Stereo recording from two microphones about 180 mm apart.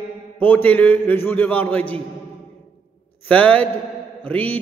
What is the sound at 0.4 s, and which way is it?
A man's voice, 10° left (ahead or behind).